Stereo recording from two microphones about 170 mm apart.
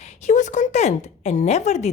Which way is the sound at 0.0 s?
45° left (ahead or behind).